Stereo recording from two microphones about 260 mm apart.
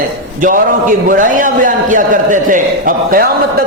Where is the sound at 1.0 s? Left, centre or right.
Right.